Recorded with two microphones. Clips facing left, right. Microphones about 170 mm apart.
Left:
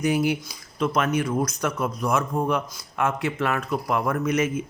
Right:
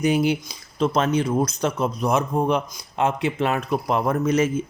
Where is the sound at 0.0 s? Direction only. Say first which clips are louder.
Right 2 dB; 25° right (ahead or behind).